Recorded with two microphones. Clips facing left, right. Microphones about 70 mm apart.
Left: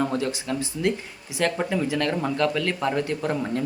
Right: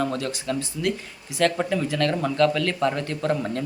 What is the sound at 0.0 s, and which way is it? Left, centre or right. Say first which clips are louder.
Speech: left 1 dB; left.